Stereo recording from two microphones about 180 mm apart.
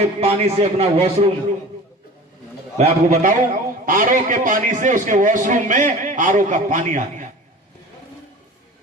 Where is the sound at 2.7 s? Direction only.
40° right (ahead or behind).